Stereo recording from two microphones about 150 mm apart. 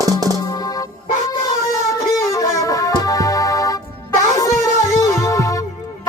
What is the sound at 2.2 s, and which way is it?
Music, 20° left (ahead or behind).